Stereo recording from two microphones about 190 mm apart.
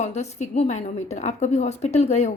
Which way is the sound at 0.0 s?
35° left (ahead or behind).